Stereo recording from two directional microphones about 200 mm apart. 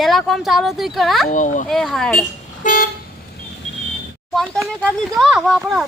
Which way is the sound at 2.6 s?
40° left (ahead or behind).